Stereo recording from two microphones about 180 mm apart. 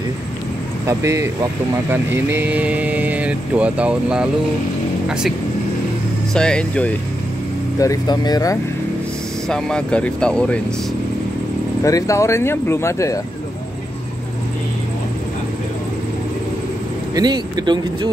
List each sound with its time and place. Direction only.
0.8 s speech: 15° right (ahead or behind)
6.3 s speech: 5° left (ahead or behind)
7.8 s speech: 20° left (ahead or behind)
9.5 s speech: 5° left (ahead or behind)
11.8 s speech: 15° left (ahead or behind)
17.1 s speech: 20° right (ahead or behind)